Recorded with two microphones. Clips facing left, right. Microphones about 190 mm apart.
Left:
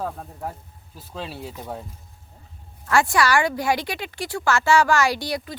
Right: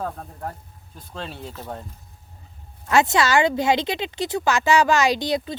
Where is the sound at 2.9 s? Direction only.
20° right (ahead or behind).